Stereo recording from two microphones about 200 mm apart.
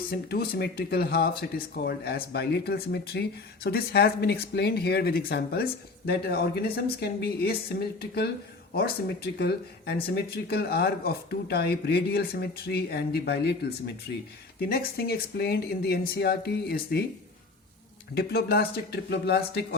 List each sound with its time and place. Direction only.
0.1 s speech: 50° left (ahead or behind)
18.1 s speech: 55° left (ahead or behind)